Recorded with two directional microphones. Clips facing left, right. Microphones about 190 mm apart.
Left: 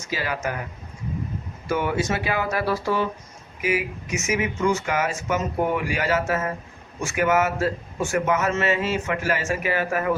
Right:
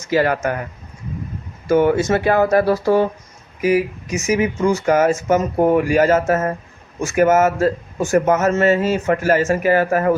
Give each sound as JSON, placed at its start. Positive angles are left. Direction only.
{"t": 0.1, "sound": "a man's voice", "side_deg": -55}
{"t": 1.6, "sound": "a man's voice", "side_deg": -45}